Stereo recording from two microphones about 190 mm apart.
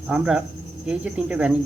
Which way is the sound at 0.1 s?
5° right (ahead or behind).